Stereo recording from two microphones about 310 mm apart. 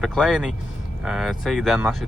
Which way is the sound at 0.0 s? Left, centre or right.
Centre.